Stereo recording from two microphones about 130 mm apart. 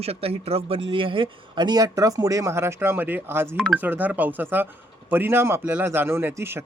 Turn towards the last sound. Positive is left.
turn(degrees=-15)  # may be behind; listen again after turning